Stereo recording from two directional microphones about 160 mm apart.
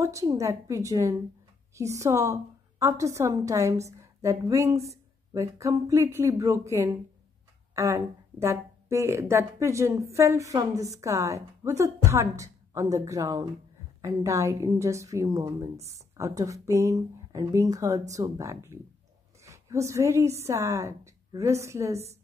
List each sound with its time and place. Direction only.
0.0 s a woman's voice: 20° right (ahead or behind)